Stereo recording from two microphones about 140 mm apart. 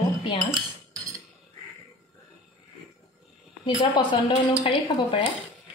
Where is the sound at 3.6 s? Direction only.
35° left (ahead or behind).